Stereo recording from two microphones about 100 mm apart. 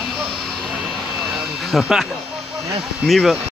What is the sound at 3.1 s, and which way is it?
Speech, centre (ahead or behind).